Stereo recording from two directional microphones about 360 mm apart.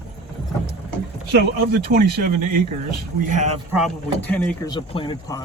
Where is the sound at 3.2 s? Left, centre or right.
Centre.